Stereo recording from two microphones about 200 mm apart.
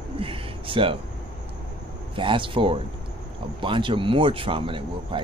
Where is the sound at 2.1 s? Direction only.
25° right (ahead or behind).